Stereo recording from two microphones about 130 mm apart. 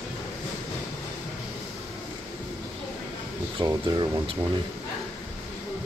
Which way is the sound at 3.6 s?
40° right (ahead or behind).